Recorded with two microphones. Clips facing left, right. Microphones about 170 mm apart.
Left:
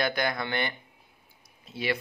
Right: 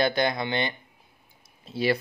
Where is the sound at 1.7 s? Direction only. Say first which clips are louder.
Right 6 dB; 35° right (ahead or behind).